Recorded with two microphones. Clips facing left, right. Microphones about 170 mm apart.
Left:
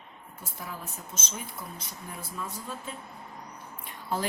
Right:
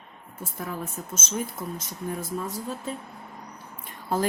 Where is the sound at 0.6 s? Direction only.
50° right (ahead or behind).